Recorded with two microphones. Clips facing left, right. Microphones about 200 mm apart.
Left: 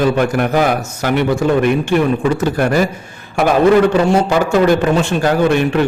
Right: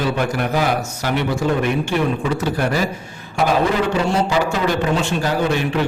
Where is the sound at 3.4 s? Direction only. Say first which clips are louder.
Left 4 dB; 60° left (ahead or behind).